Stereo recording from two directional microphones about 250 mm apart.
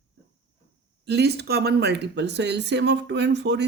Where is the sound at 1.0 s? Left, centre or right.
Right.